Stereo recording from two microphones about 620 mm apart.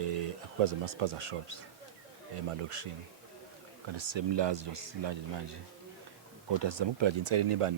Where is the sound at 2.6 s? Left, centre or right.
Right.